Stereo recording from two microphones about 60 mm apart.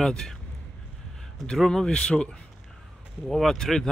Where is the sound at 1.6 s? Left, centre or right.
Centre.